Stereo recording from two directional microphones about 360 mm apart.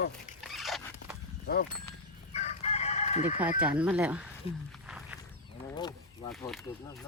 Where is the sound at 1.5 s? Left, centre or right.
Left.